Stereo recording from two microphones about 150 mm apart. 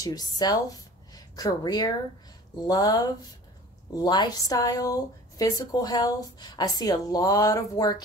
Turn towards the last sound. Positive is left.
turn(degrees=25)  # may be behind; listen again after turning